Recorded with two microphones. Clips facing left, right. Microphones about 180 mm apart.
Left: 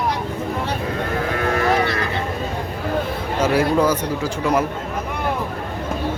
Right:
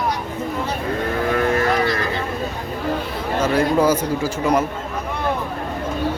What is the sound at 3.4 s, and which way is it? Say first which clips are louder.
Speech: left 1 dB; 10° left (ahead or behind).